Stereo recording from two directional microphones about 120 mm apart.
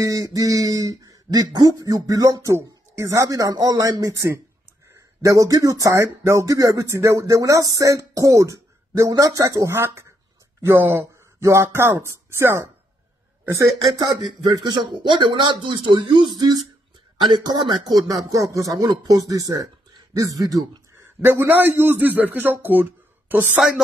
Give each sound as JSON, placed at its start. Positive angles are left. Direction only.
{"t": 0.0, "sound": "speech", "side_deg": -30}
{"t": 13.9, "sound": "a man's voice", "side_deg": -35}